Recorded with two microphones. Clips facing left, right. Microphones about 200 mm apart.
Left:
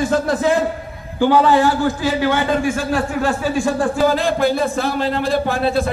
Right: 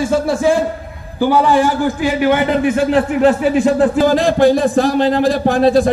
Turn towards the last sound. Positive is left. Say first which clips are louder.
# right 7 dB
turn(degrees=-35)  # may be behind; listen again after turning